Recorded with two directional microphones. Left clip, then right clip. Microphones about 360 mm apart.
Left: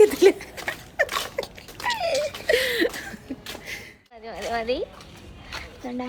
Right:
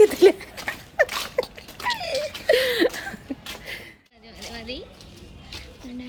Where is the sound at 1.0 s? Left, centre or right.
Centre.